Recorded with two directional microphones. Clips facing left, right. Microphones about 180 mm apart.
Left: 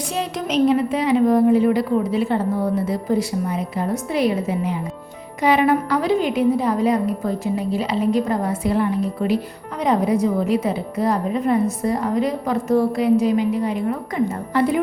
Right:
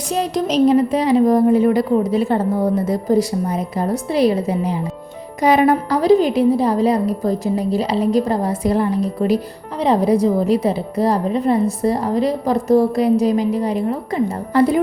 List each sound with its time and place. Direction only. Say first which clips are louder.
0.1 s a woman's voice: right 6 dB; 40° right (ahead or behind)